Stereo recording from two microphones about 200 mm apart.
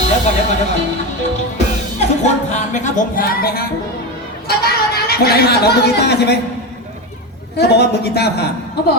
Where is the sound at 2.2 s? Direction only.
35° left (ahead or behind).